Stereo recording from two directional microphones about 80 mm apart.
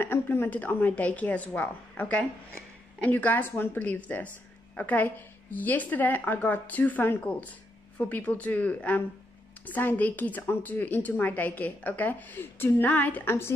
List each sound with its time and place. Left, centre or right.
0.0 s a woman's voice: left